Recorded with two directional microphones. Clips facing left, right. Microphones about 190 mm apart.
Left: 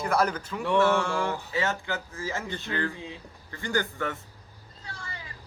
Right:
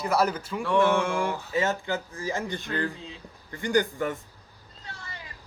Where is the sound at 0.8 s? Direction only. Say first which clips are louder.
Right 1 dB; 15° right (ahead or behind).